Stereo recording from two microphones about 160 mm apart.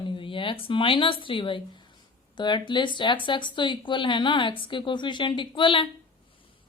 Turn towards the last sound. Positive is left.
turn(degrees=30)  # may be behind; listen again after turning